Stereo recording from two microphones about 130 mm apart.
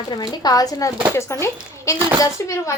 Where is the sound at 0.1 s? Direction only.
30° left (ahead or behind).